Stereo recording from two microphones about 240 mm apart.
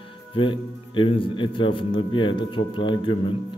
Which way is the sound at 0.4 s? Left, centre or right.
Left.